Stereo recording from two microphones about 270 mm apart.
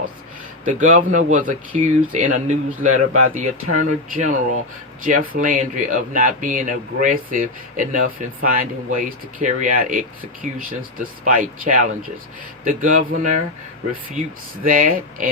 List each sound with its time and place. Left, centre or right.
0.6 s speech: right
14.6 s speech: right